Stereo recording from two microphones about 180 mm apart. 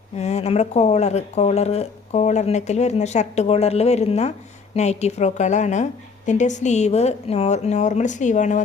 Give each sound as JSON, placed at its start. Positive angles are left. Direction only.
{"t": 0.2, "sound": "speech", "side_deg": 35}